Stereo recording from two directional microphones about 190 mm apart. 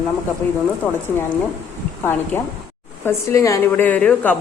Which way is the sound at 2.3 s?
10° left (ahead or behind).